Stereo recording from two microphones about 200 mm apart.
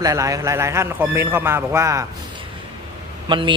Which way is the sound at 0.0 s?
15° right (ahead or behind).